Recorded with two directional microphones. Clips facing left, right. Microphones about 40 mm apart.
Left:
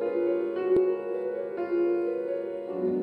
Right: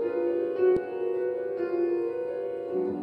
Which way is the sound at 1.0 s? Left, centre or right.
Centre.